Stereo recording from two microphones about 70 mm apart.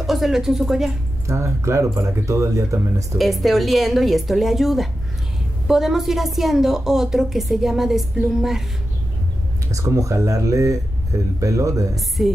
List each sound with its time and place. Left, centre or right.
0.0 s speech: centre
1.2 s speech: right
3.2 s a woman's voice: centre
9.7 s speech: right
12.2 s a woman's voice: centre